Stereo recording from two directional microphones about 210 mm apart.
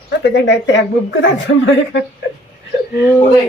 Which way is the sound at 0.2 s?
55° left (ahead or behind).